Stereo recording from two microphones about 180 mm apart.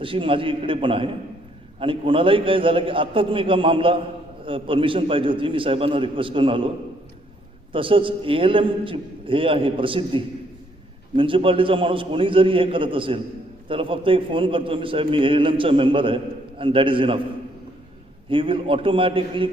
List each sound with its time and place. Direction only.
0.0 s a man's voice: 30° right (ahead or behind)
7.7 s a man's voice: 30° right (ahead or behind)
18.3 s a man's voice: 30° right (ahead or behind)